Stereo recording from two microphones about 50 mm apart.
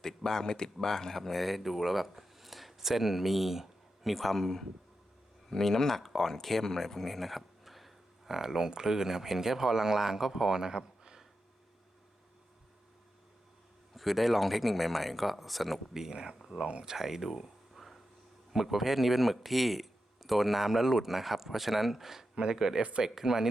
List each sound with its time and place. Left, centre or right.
0.0 s speech: centre
13.9 s speech: centre; by 16.9 s right
16.9 s a sound: centre
18.5 s speech: centre
22.8 s speech: right
23.0 s speech: centre